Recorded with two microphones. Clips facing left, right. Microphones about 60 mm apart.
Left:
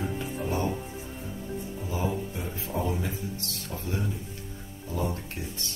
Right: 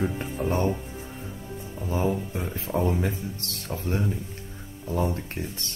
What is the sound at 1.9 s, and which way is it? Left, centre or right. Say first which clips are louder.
Speech: right 5 dB; right.